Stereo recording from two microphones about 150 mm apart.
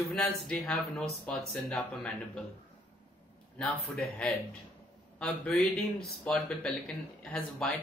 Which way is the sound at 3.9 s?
5° left (ahead or behind).